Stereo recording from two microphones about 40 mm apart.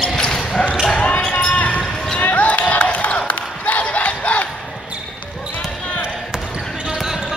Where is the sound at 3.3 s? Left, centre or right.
Left.